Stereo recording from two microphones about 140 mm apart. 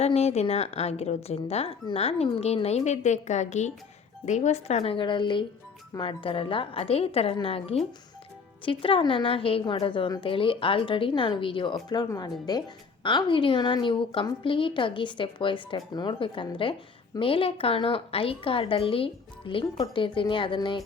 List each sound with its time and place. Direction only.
0.0 s a woman's voice: 50° left (ahead or behind); by 20.8 s 35° left (ahead or behind)